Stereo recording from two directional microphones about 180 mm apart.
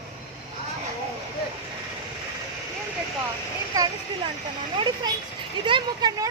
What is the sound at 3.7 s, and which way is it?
Speech, 20° right (ahead or behind).